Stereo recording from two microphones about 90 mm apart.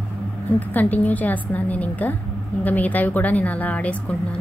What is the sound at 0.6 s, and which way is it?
A woman's voice, 20° left (ahead or behind).